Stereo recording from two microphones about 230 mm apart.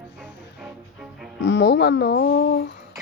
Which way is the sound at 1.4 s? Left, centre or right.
Left.